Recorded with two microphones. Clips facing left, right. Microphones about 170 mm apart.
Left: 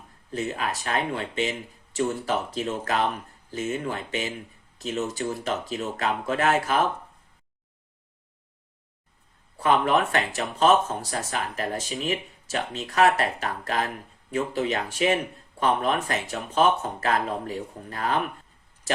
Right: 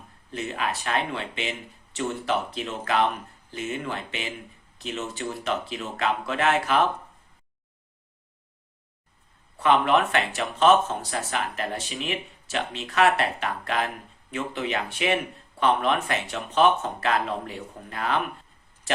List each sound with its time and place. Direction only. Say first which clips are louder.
0.3 s speech: left 1 dB; 40° left (ahead or behind)
9.6 s speech: right 1 dB; 40° left (ahead or behind)